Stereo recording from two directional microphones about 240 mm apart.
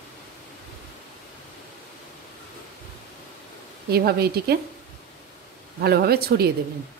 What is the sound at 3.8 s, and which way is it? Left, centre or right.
Speech, right.